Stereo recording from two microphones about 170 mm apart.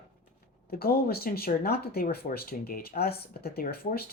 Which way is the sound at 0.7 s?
65° left (ahead or behind).